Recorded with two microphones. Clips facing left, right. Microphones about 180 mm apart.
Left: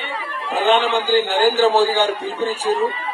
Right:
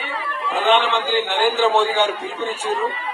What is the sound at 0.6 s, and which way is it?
A man's voice, 35° left (ahead or behind).